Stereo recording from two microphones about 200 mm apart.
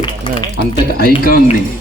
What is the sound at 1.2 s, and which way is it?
Speech, 45° left (ahead or behind).